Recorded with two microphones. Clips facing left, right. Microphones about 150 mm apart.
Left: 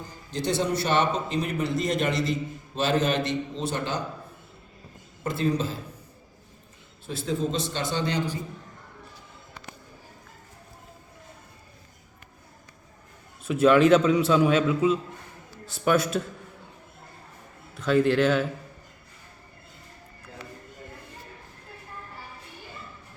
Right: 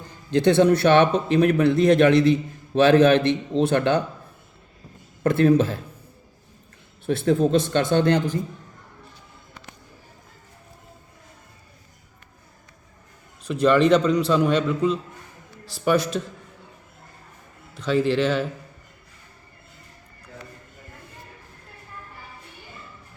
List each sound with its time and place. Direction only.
0.3 s speech: 60° right (ahead or behind)
5.2 s speech: 60° right (ahead or behind)
7.0 s speech: 60° right (ahead or behind)
13.4 s a man's voice: 5° left (ahead or behind)
17.7 s a man's voice: centre (ahead or behind)